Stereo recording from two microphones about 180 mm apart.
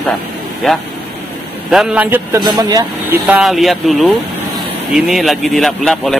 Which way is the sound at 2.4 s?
20° right (ahead or behind).